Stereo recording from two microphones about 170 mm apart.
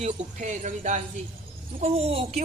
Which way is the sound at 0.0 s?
45° right (ahead or behind).